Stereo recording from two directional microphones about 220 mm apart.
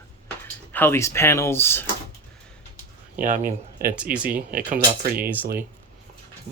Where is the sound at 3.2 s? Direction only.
35° right (ahead or behind).